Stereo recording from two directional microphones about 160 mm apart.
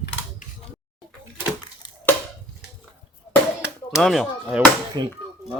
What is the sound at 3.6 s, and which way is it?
Speech, centre (ahead or behind).